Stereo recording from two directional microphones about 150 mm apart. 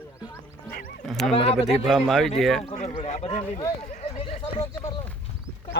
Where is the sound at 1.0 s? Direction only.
Centre (ahead or behind).